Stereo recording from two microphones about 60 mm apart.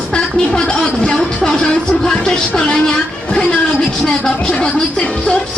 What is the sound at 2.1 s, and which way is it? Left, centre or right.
Speech, centre.